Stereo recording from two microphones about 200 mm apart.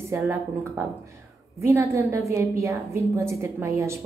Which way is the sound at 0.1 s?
15° right (ahead or behind).